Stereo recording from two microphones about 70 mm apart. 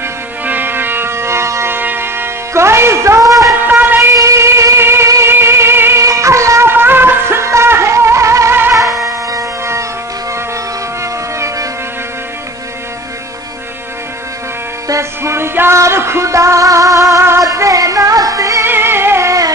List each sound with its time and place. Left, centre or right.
0.0 s music: right
3.6 s music: right
4.1 s music: right
6.7 s music: right
11.0 s music: right
14.9 s music: right
17.1 s music: right
17.4 s music: right
18.7 s music: right